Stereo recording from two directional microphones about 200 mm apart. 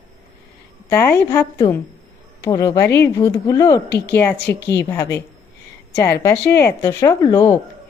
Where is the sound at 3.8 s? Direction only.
55° left (ahead or behind).